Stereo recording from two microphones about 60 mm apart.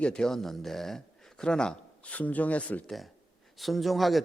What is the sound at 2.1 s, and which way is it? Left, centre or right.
Speech, left.